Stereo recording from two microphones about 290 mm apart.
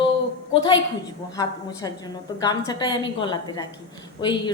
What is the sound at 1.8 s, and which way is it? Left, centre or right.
A woman's voice, centre.